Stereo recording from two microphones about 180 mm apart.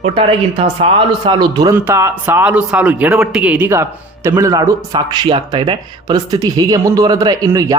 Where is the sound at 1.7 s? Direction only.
10° right (ahead or behind).